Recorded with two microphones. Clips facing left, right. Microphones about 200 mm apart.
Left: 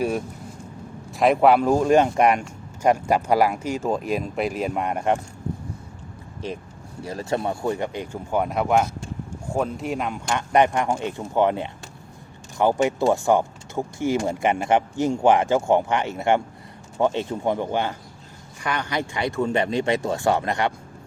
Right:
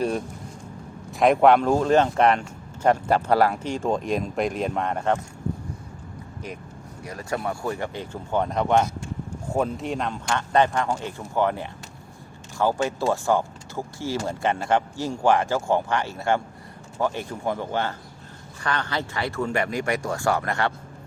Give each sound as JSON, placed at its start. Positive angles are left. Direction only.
{"t": 1.1, "sound": "speech", "side_deg": 0}
{"t": 7.0, "sound": "speech", "side_deg": 30}
{"t": 10.2, "sound": "speech", "side_deg": 15}